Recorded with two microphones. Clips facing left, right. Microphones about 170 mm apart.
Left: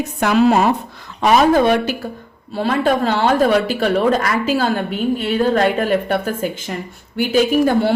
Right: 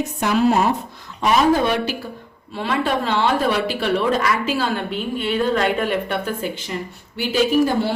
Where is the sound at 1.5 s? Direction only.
50° left (ahead or behind).